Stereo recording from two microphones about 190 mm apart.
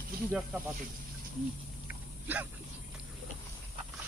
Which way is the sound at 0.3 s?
5° right (ahead or behind).